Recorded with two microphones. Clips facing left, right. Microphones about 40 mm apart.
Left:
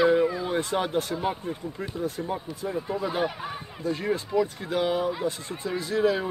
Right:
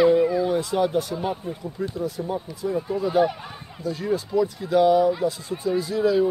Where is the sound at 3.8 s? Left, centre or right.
Left.